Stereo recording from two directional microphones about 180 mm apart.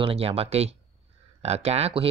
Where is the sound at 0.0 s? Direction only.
30° right (ahead or behind).